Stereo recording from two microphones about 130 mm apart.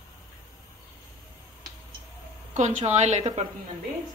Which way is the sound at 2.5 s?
60° right (ahead or behind).